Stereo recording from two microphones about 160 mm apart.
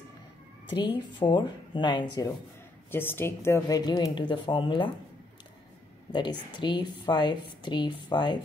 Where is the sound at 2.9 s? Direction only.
15° left (ahead or behind); by 4.9 s 30° left (ahead or behind).